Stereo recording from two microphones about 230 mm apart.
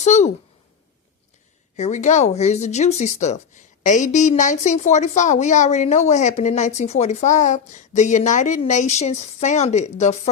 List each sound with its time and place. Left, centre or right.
0.0 s a woman's voice: left
1.7 s speech: left